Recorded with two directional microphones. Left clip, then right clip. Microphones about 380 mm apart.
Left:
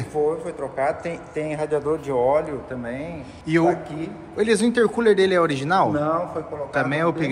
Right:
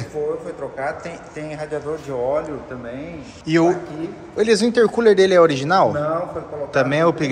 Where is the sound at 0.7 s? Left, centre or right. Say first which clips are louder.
Left 5 dB; left.